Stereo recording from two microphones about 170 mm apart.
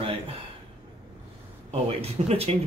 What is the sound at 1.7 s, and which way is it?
Speech, 35° right (ahead or behind).